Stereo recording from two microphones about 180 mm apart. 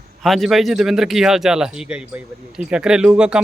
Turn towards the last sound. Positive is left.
turn(degrees=-5)  # may be behind; listen again after turning